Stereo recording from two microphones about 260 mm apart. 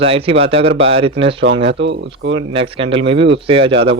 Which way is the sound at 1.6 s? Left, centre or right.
Right.